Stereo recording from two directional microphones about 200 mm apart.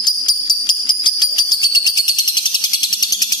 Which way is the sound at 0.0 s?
20° left (ahead or behind).